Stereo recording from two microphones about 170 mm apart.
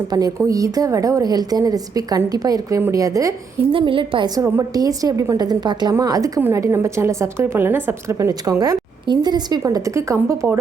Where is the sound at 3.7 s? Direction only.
30° right (ahead or behind).